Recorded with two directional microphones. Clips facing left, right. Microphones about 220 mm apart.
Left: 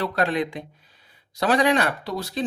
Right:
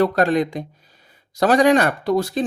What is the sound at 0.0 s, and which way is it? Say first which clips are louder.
Speech: right 7 dB; 45° right (ahead or behind).